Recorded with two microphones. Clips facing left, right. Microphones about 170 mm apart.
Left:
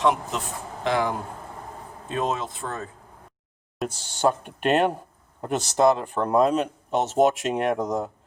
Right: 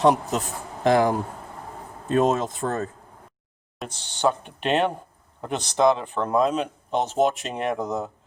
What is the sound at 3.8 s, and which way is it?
Speech, 10° left (ahead or behind).